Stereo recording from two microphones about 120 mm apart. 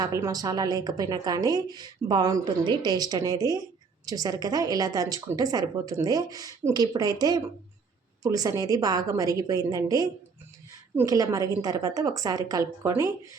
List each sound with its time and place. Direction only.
0.0 s a woman's voice: 30° right (ahead or behind)